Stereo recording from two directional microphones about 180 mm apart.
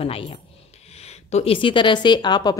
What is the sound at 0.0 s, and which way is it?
Speech, 30° left (ahead or behind).